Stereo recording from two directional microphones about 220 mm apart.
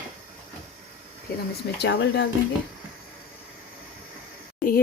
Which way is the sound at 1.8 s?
50° left (ahead or behind).